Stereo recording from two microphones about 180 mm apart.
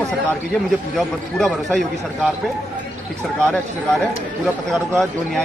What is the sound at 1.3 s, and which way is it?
Speech, centre (ahead or behind).